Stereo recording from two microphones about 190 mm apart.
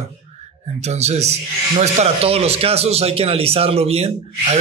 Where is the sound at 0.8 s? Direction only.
35° right (ahead or behind).